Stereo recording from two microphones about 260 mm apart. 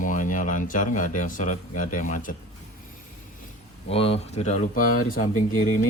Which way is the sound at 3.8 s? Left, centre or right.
Left.